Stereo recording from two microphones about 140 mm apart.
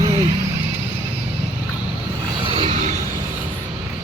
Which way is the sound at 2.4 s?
40° right (ahead or behind).